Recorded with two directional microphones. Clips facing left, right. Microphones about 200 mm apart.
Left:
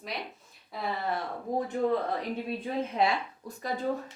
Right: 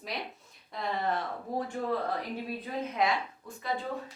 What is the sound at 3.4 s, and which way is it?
Speech, 40° left (ahead or behind).